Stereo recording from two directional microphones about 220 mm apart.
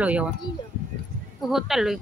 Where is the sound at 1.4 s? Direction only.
Centre (ahead or behind).